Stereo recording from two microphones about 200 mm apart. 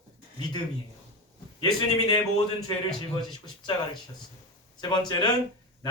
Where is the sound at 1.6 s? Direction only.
20° left (ahead or behind).